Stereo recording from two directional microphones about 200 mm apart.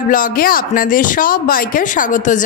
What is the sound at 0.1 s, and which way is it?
Speech, 45° left (ahead or behind).